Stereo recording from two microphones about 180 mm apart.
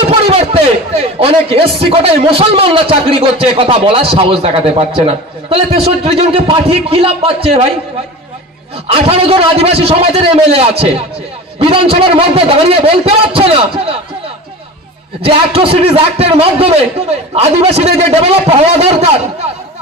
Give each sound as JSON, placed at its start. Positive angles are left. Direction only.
{"t": 0.1, "sound": "speech", "side_deg": -30}
{"t": 8.9, "sound": "a man's voice", "side_deg": -30}
{"t": 15.2, "sound": "a man's voice", "side_deg": -30}